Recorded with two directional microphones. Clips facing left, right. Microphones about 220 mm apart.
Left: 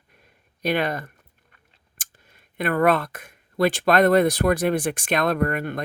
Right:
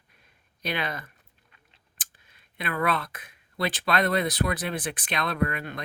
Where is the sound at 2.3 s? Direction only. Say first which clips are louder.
Left 9 dB; 45° left (ahead or behind).